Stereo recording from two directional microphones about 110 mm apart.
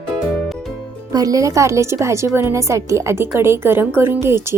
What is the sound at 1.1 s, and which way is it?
A woman's voice, 35° right (ahead or behind).